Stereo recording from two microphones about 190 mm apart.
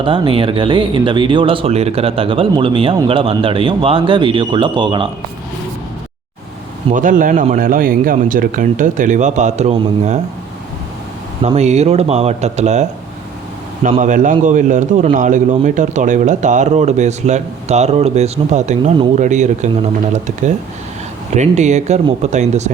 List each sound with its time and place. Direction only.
0.0 s speech: 25° right (ahead or behind)
6.9 s speech: 45° right (ahead or behind)
11.4 s speech: 35° right (ahead or behind)
13.9 s speech: 40° right (ahead or behind)